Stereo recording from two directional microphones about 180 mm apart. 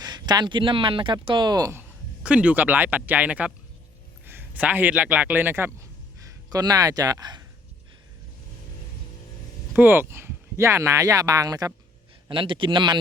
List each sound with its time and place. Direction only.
0.0 s speech: 25° right (ahead or behind)
2.2 s a man's voice: 5° right (ahead or behind); by 7.4 s 25° right (ahead or behind)
9.7 s speech: 10° right (ahead or behind); by 13.0 s 25° right (ahead or behind)